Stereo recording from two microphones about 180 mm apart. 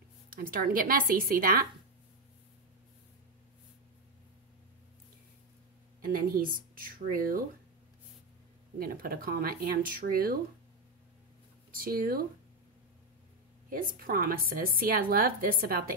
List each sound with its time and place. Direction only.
0.3 s a woman's voice: 50° right (ahead or behind)
5.9 s speech: 50° right (ahead or behind)
8.7 s a woman's voice: 55° right (ahead or behind)
11.7 s a woman's voice: 50° right (ahead or behind)
13.7 s a woman's voice: 50° right (ahead or behind)